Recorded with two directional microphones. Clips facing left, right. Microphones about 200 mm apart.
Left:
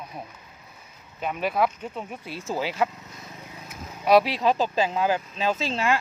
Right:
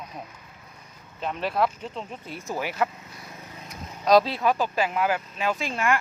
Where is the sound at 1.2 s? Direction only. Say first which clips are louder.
Left 1 dB; 10° left (ahead or behind).